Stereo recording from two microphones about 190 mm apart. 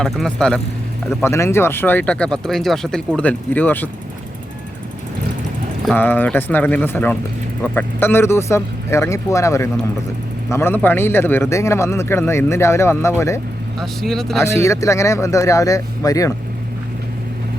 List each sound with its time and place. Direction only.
0.0 s a man's voice: 5° left (ahead or behind)
5.8 s a man's voice: 10° left (ahead or behind)
13.7 s speech: centre (ahead or behind)
14.4 s a man's voice: 15° left (ahead or behind)